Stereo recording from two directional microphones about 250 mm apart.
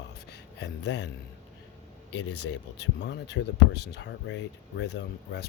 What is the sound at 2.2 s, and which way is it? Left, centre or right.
Speech, left.